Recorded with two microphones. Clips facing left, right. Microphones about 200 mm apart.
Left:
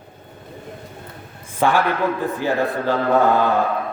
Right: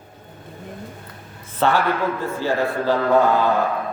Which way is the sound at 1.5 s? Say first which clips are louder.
Left 1 dB; 10° left (ahead or behind).